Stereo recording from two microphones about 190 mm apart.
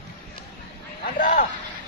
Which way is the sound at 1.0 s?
40° left (ahead or behind).